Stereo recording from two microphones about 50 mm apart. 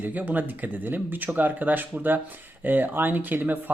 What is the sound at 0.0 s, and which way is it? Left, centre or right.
Speech, right.